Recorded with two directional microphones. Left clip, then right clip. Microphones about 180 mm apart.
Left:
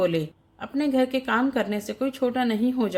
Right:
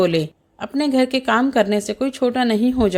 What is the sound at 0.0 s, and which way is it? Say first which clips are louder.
A woman's voice: right 6 dB; 45° right (ahead or behind).